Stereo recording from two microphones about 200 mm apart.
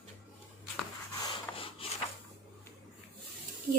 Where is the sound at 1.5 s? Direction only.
25° left (ahead or behind).